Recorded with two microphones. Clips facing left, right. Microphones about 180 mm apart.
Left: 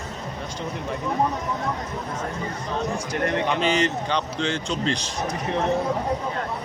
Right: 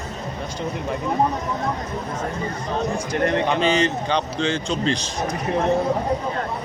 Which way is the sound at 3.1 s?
25° right (ahead or behind).